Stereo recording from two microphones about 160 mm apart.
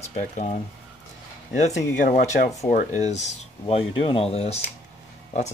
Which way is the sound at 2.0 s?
70° left (ahead or behind).